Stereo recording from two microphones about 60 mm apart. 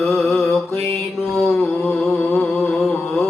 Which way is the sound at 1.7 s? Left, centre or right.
Left.